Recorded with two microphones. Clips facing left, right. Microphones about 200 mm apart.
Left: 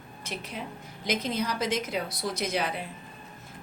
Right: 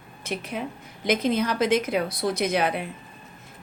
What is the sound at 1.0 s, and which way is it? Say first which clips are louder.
A woman's voice: right 6 dB; 55° right (ahead or behind).